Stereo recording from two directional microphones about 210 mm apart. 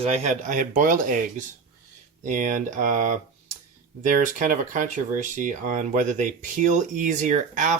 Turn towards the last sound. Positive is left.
turn(degrees=-40)  # may be behind; listen again after turning